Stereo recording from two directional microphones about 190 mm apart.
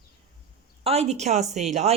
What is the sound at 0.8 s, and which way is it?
Speech, 35° right (ahead or behind).